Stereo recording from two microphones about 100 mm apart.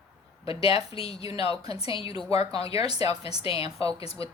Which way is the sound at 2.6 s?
40° right (ahead or behind).